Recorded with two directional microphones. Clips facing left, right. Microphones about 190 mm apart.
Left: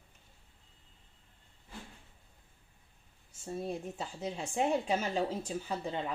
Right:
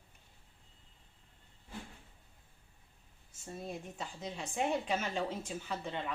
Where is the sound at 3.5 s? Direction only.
30° left (ahead or behind).